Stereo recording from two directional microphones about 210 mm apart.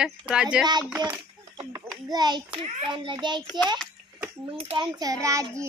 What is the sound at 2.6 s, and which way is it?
Speech, 25° right (ahead or behind).